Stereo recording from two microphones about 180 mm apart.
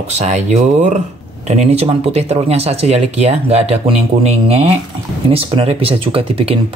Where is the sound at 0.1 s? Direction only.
40° right (ahead or behind).